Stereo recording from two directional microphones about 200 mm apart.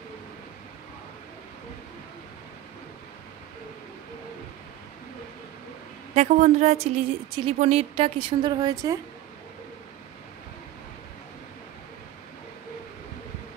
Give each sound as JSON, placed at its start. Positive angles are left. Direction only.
{"t": 6.1, "sound": "a woman's voice", "side_deg": -35}